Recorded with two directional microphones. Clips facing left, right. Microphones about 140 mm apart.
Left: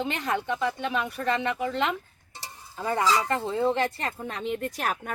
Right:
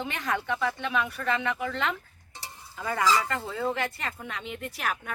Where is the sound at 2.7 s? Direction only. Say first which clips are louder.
Left 1 dB; 30° left (ahead or behind).